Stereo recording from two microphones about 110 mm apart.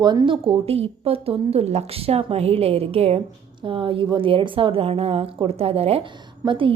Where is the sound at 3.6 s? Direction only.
50° right (ahead or behind).